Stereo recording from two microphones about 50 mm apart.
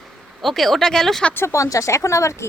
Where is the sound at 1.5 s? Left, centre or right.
Left.